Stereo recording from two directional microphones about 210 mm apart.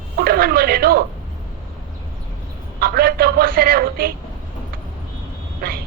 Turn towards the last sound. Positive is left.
turn(degrees=-45)  # may be behind; listen again after turning